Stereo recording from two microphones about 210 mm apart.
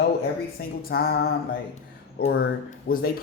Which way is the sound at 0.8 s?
45° left (ahead or behind).